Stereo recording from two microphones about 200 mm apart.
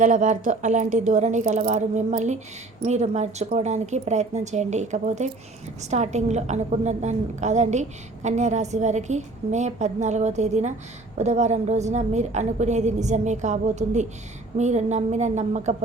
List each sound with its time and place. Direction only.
0.0 s a woman's voice: 40° right (ahead or behind)